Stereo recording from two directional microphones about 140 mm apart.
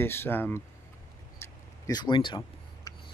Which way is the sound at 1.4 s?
30° left (ahead or behind).